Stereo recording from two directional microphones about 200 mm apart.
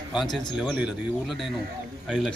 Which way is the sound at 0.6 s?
5° right (ahead or behind).